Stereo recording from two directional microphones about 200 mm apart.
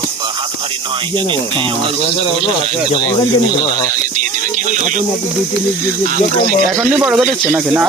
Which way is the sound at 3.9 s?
40° right (ahead or behind).